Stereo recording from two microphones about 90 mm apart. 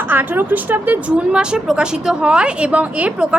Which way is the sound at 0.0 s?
20° right (ahead or behind).